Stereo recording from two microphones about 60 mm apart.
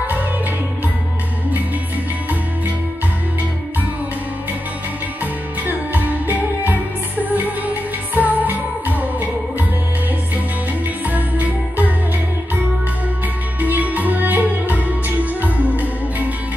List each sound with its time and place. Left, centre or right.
5.2 s music: right
11.1 s music: right
13.6 s music: right